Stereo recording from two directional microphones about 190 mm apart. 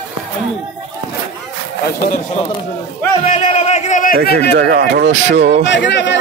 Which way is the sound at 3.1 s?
35° left (ahead or behind).